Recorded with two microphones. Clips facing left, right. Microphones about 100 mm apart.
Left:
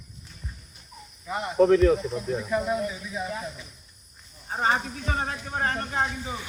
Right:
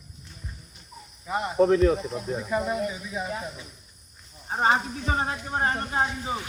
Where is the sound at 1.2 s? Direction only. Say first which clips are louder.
Left 1 dB; 20° right (ahead or behind).